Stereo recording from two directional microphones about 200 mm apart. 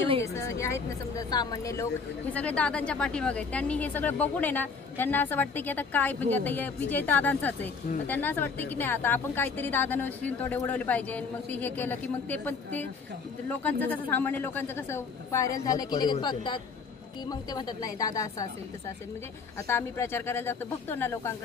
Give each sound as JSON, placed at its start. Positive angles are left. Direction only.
{"t": 0.2, "sound": "speech", "side_deg": 15}
{"t": 19.7, "sound": "speech", "side_deg": 10}